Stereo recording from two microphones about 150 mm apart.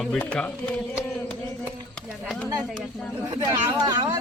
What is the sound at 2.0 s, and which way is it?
Speech, centre (ahead or behind).